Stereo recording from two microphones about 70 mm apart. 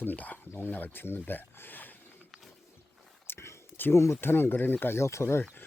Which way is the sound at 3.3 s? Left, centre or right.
Left.